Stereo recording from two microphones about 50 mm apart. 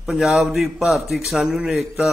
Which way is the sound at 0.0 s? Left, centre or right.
Centre.